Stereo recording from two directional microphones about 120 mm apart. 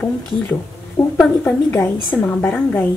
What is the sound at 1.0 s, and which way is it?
Speech, 45° left (ahead or behind).